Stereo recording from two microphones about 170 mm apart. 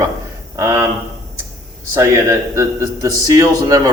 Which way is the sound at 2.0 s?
15° right (ahead or behind).